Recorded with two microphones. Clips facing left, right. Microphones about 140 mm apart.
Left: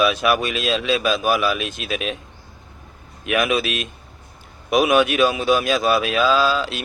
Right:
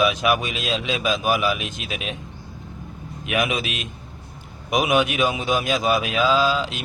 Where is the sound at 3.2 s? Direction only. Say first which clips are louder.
Left 4 dB; 15° right (ahead or behind).